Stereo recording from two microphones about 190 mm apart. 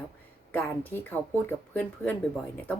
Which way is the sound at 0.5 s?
10° left (ahead or behind).